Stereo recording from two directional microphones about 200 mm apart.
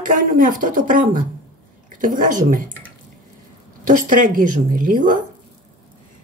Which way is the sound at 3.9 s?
40° right (ahead or behind).